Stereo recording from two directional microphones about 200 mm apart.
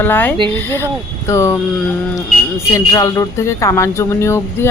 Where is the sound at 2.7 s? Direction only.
15° left (ahead or behind).